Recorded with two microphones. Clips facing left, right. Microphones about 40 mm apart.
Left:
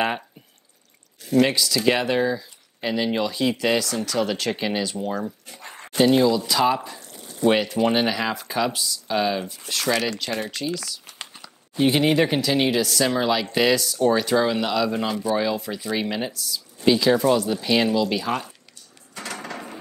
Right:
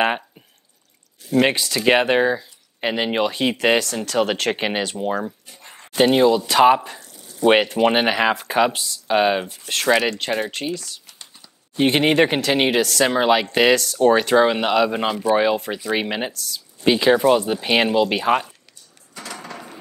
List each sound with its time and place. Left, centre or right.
1.3 s speech: right
5.7 s bow-wow: left
5.9 s speech: right
7.1 s a sound: left
7.4 s speech: right
10.7 s crumpling: left
11.7 s speech: right
19.2 s mechanisms: centre